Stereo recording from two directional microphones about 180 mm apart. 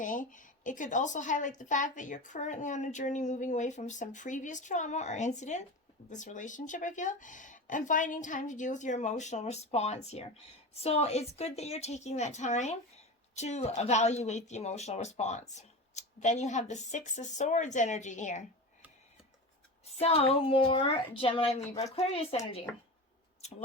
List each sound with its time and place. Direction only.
0.0 s a woman's voice: 45° left (ahead or behind)
19.8 s speech: 35° left (ahead or behind)